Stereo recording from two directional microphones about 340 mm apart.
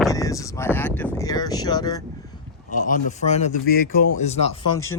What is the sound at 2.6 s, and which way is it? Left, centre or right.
Speech, left.